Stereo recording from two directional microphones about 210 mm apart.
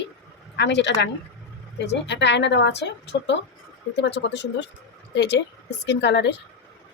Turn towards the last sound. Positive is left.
turn(degrees=55)  # may be behind; listen again after turning